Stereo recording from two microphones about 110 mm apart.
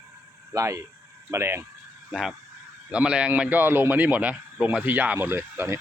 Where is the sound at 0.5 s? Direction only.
25° right (ahead or behind).